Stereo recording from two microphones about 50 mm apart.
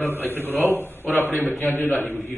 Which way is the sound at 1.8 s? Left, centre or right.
Left.